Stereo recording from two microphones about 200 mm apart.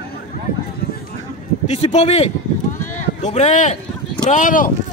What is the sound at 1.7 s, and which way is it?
Speech, 35° left (ahead or behind).